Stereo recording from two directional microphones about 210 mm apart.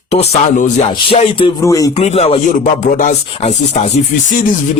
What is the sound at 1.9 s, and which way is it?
Speech, 30° left (ahead or behind).